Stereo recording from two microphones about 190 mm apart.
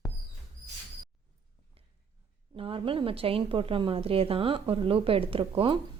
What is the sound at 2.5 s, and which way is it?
A woman's voice, 30° right (ahead or behind).